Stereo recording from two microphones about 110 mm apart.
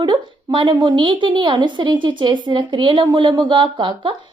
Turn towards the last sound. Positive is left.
turn(degrees=-45)  # may be behind; listen again after turning